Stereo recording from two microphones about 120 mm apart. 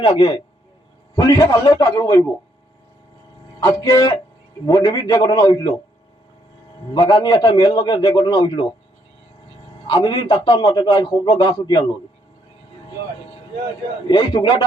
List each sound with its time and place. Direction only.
0.0 s a man's voice: 40° left (ahead or behind)
3.6 s a man's voice: 30° left (ahead or behind)
6.9 s a man's voice: 35° left (ahead or behind)
9.8 s a man's voice: 45° left (ahead or behind)
14.1 s a man's voice: 40° left (ahead or behind)